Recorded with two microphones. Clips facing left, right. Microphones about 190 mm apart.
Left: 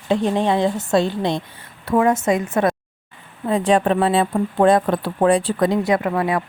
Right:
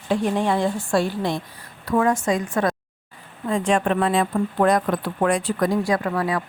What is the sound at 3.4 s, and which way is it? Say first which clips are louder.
Speech: left 4 dB; 35° left (ahead or behind).